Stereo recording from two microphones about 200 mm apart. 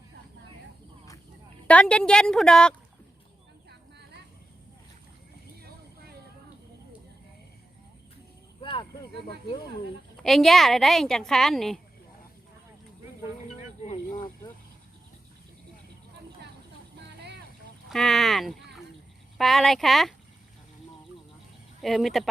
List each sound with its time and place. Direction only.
1.6 s a woman's voice: 5° left (ahead or behind)
3.7 s vehicle: 55° right (ahead or behind)
10.2 s a woman's voice: centre (ahead or behind)
17.8 s a woman's voice: centre (ahead or behind)
21.8 s a woman's voice: centre (ahead or behind)